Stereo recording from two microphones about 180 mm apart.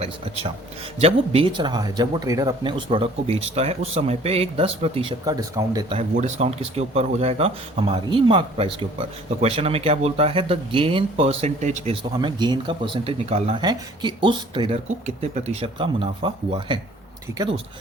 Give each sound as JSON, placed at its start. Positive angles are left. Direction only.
{"t": 0.9, "sound": "speech", "side_deg": -35}
{"t": 5.2, "sound": "speech", "side_deg": -20}
{"t": 5.9, "sound": "speech", "side_deg": -40}
{"t": 12.1, "sound": "speech", "side_deg": -25}